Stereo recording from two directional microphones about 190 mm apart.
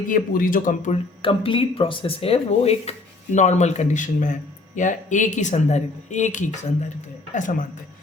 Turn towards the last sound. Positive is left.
turn(degrees=45)  # may be behind; listen again after turning